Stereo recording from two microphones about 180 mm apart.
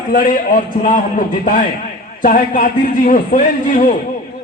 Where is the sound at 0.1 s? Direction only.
50° left (ahead or behind).